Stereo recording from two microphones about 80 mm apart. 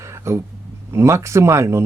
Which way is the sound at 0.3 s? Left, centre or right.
Right.